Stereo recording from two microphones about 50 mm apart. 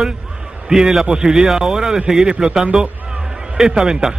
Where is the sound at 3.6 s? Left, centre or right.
Centre.